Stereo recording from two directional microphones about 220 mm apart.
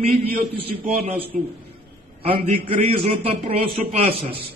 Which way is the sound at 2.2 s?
25° right (ahead or behind).